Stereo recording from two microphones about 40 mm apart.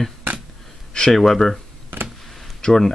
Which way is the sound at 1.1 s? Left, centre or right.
Centre.